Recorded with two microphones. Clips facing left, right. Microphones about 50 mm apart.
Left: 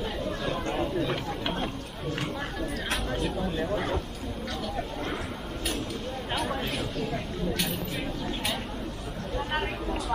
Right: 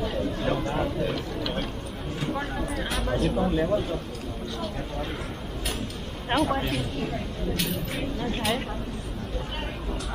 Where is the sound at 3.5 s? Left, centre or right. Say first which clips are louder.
Right 5 dB; centre.